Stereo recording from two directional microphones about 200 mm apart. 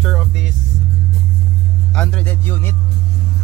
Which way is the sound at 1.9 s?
5° left (ahead or behind).